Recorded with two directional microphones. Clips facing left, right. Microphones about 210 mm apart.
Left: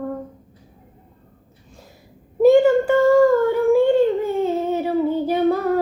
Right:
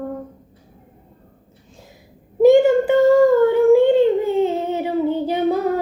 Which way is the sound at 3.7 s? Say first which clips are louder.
Even; 20° right (ahead or behind).